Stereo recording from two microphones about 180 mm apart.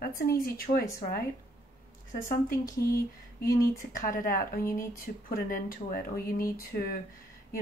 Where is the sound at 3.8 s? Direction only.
50° left (ahead or behind).